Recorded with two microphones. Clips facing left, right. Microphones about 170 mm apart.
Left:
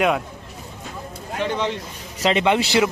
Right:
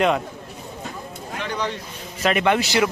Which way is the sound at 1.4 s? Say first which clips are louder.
Left 4 dB; 25° left (ahead or behind).